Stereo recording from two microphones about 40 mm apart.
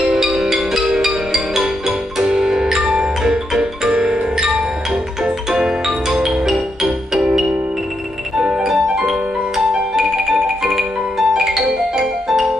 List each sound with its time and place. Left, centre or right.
0.0 s music: centre
8.6 s music: centre